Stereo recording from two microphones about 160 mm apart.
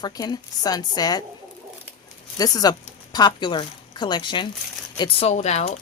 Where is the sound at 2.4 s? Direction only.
25° left (ahead or behind).